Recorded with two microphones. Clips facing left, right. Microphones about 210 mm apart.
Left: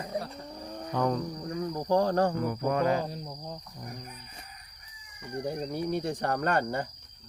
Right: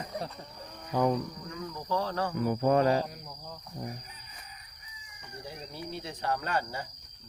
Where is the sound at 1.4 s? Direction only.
45° left (ahead or behind).